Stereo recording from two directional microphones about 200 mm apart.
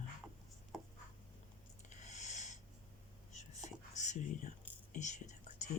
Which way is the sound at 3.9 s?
35° left (ahead or behind).